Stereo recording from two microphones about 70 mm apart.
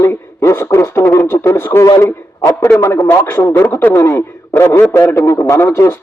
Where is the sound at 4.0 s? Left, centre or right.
Left.